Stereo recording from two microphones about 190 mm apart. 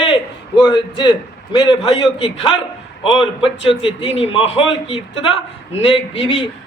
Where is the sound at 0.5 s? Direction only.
25° left (ahead or behind).